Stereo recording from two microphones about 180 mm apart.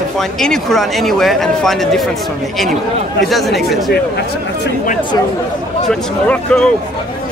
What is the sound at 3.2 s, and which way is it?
Speech, centre (ahead or behind).